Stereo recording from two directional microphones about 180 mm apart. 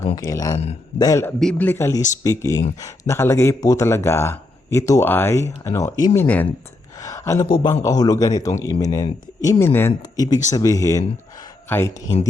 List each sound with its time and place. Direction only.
0.3 s speech: 20° left (ahead or behind)
1.4 s speech: 5° left (ahead or behind)